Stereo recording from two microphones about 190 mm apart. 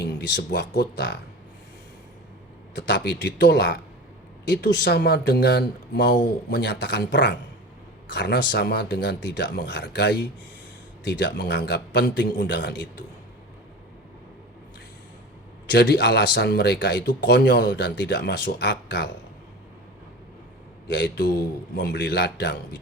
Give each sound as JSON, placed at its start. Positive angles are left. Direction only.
{"t": 0.0, "sound": "speech", "side_deg": 60}
{"t": 2.7, "sound": "speech", "side_deg": 65}
{"t": 15.7, "sound": "speech", "side_deg": 65}
{"t": 20.8, "sound": "speech", "side_deg": 65}